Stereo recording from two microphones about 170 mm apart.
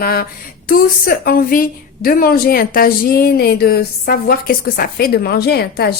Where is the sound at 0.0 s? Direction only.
65° left (ahead or behind).